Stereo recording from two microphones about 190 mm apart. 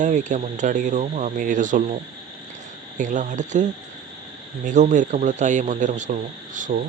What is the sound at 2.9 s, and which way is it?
Speech, 40° right (ahead or behind).